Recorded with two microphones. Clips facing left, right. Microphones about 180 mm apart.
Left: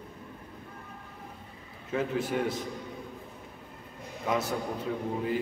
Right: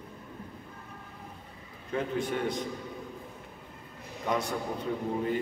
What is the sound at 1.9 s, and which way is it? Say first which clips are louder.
Speech: left 1 dB; 5° left (ahead or behind).